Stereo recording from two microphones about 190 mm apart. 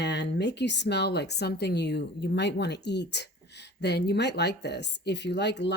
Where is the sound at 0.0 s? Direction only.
65° left (ahead or behind).